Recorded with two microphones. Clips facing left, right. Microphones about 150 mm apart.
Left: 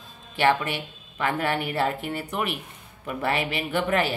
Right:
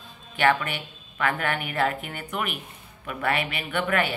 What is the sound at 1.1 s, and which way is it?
Speech, 30° left (ahead or behind).